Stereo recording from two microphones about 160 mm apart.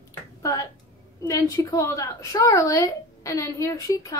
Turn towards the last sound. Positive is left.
turn(degrees=20)  # may be behind; listen again after turning